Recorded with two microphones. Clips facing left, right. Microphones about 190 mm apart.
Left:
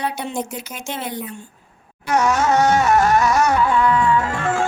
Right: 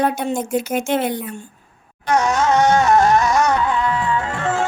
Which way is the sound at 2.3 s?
15° right (ahead or behind).